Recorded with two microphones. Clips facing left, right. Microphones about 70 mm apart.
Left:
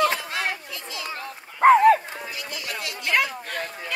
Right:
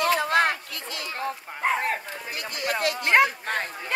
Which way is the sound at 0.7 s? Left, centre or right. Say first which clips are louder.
Even; right.